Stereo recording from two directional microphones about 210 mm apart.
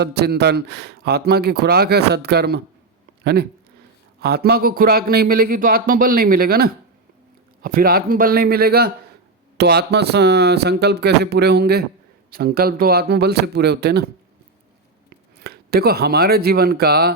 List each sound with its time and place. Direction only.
0.0 s speech: 50° right (ahead or behind)
4.2 s speech: 50° right (ahead or behind)
15.4 s speech: 45° right (ahead or behind)